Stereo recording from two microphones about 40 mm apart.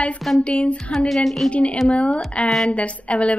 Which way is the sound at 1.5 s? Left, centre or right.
Left.